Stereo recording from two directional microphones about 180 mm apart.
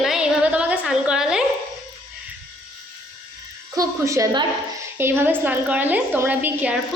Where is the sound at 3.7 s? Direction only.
15° right (ahead or behind).